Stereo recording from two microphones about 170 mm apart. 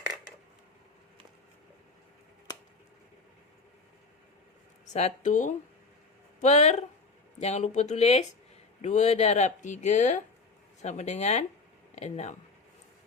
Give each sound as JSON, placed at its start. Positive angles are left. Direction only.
{"t": 4.9, "sound": "speech", "side_deg": 45}